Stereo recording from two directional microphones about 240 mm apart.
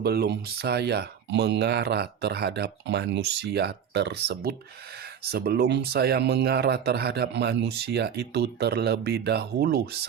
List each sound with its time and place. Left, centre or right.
0.0 s speech: right